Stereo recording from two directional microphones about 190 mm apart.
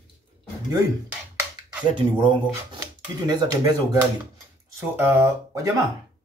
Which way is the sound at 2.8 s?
20° right (ahead or behind).